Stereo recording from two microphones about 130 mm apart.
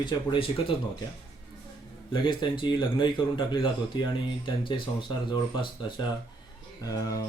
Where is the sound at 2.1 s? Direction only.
40° left (ahead or behind).